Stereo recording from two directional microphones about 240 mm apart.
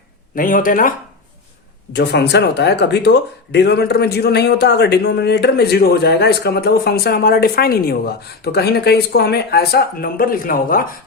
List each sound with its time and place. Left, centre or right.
0.3 s speech: left